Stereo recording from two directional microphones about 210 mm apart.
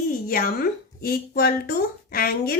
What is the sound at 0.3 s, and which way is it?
Speech, 45° left (ahead or behind).